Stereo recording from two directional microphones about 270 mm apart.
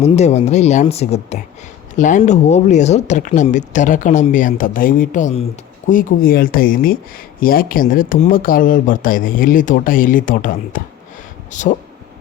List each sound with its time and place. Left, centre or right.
0.0 s speech: left